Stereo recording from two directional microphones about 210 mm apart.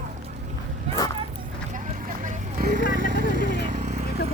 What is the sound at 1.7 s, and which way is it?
Vehicle, 35° right (ahead or behind).